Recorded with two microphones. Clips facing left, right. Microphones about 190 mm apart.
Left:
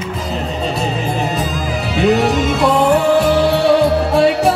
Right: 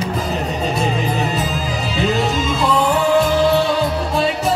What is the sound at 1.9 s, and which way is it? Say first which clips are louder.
Music: left 6 dB; 65° left (ahead or behind).